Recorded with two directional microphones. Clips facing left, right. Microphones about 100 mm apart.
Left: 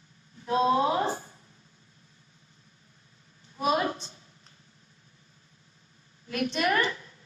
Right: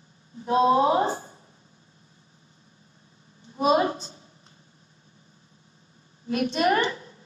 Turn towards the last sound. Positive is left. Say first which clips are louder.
# right 4 dB
turn(degrees=-25)  # may be behind; listen again after turning